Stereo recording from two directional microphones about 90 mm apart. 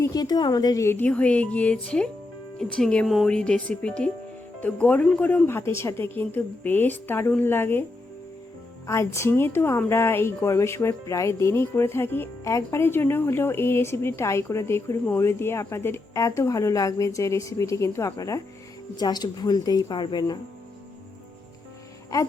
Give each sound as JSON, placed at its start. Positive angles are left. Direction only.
{"t": 0.0, "sound": "a woman's voice", "side_deg": 45}
{"t": 0.9, "sound": "speech", "side_deg": 20}
{"t": 5.5, "sound": "speech", "side_deg": 25}
{"t": 8.9, "sound": "speech", "side_deg": 30}
{"t": 18.9, "sound": "a woman's voice", "side_deg": 50}
{"t": 20.0, "sound": "speech", "side_deg": 65}
{"t": 22.1, "sound": "a woman's voice", "side_deg": 40}